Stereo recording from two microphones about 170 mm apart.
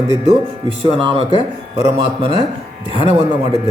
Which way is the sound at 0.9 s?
30° right (ahead or behind).